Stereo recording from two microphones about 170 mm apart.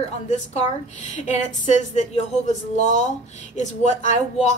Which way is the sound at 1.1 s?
45° left (ahead or behind).